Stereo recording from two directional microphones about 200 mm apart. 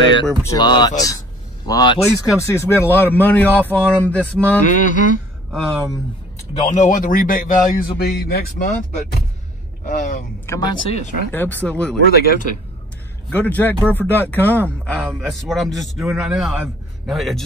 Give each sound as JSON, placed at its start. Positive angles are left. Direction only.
{"t": 0.4, "sound": "speech", "side_deg": 20}
{"t": 2.1, "sound": "speech", "side_deg": 15}
{"t": 4.6, "sound": "mantra", "side_deg": 40}
{"t": 6.7, "sound": "a man's voice", "side_deg": 40}
{"t": 9.8, "sound": "mantra", "side_deg": 40}
{"t": 10.4, "sound": "speech", "side_deg": 20}
{"t": 11.3, "sound": "speech", "side_deg": 10}
{"t": 12.1, "sound": "a man's voice", "side_deg": 50}
{"t": 13.3, "sound": "speech", "side_deg": 10}
{"t": 15.0, "sound": "a man's voice", "side_deg": -5}